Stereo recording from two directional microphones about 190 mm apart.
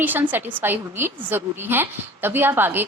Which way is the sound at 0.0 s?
10° right (ahead or behind).